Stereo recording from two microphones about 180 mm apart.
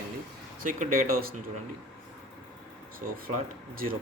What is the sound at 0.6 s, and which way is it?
Speech, 45° right (ahead or behind).